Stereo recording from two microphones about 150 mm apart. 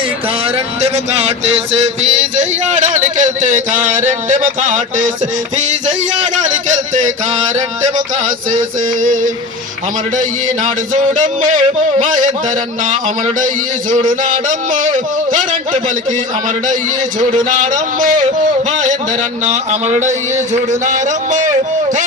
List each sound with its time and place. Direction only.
0.8 s music: 45° right (ahead or behind)
2.3 s a man's voice: 55° right (ahead or behind)
6.3 s a man's voice: 55° right (ahead or behind)
8.5 s a man's voice: 60° right (ahead or behind)
14.0 s a man's voice: 60° right (ahead or behind)
17.2 s a man's voice: 60° right (ahead or behind)
19.5 s music: 50° right (ahead or behind)
20.5 s a man's voice: 55° right (ahead or behind)